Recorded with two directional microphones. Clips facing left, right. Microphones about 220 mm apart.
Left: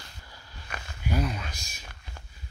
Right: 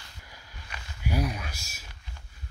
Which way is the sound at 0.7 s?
50° left (ahead or behind).